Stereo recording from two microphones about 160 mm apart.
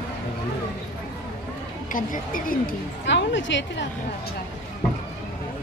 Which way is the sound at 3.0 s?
90° left.